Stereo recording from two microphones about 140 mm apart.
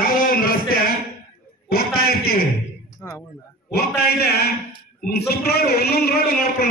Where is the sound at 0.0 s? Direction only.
90° left.